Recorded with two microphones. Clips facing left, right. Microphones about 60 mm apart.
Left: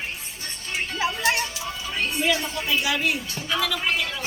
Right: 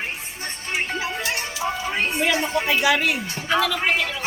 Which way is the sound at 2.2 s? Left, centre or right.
Right.